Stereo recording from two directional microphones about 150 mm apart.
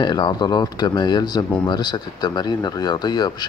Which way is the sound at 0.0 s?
30° left (ahead or behind).